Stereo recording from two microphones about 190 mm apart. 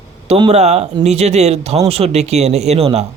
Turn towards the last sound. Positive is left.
turn(degrees=-35)  # may be behind; listen again after turning